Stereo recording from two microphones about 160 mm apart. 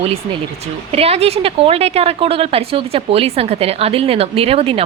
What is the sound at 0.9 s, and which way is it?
A woman's voice, 40° right (ahead or behind).